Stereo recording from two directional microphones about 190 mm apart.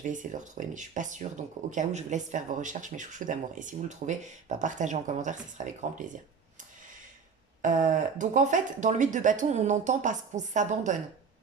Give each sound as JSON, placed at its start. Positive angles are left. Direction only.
{"t": 0.0, "sound": "speech", "side_deg": -45}
{"t": 7.6, "sound": "speech", "side_deg": -45}